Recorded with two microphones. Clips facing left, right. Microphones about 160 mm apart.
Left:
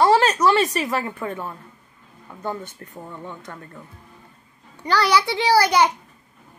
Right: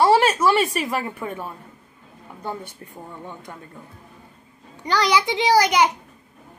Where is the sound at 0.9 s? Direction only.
15° right (ahead or behind).